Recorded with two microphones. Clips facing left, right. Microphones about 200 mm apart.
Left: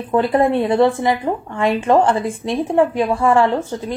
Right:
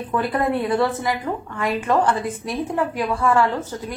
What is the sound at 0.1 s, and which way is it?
A woman's voice, 25° left (ahead or behind).